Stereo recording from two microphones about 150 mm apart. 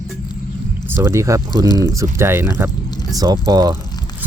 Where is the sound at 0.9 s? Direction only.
15° right (ahead or behind).